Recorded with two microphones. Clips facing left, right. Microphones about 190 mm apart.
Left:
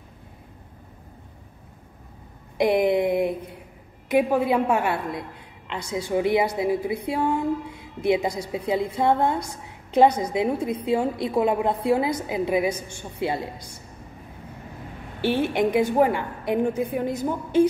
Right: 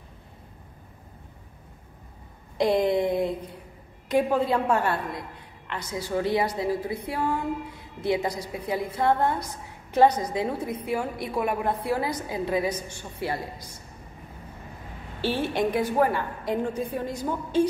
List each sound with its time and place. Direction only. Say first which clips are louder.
2.6 s a sound: left 2 dB; 15° left (ahead or behind)
4.1 s a woman's voice: left 2 dB; 10° left (ahead or behind)
15.2 s a woman's voice: left 4 dB; 20° left (ahead or behind)